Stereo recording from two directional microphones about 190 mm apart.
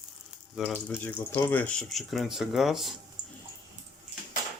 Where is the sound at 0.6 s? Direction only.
Centre (ahead or behind).